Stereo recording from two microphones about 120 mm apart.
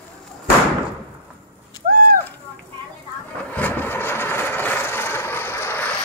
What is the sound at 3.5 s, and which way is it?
Vehicle, 15° left (ahead or behind).